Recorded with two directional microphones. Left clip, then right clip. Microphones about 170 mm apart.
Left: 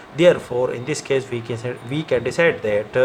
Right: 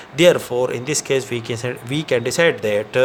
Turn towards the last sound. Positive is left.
turn(degrees=-55)  # may be behind; listen again after turning